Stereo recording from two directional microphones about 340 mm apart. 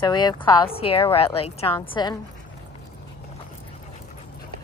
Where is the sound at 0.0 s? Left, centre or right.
Centre.